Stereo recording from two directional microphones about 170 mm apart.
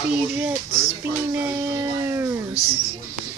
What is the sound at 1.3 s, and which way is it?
Music, 10° right (ahead or behind).